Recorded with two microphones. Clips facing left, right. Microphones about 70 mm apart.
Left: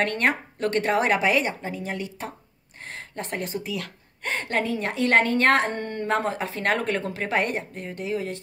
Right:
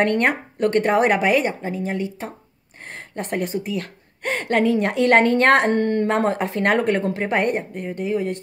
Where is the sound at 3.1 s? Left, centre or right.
Right.